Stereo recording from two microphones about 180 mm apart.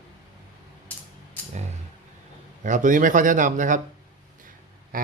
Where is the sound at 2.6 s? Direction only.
45° right (ahead or behind).